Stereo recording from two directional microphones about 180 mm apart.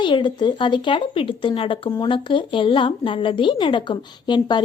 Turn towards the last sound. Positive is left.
turn(degrees=25)  # may be behind; listen again after turning